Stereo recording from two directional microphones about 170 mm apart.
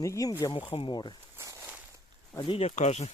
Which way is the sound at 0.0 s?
20° left (ahead or behind).